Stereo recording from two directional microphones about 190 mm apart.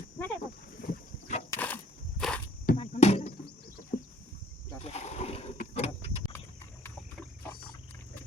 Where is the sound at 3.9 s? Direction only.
50° left (ahead or behind).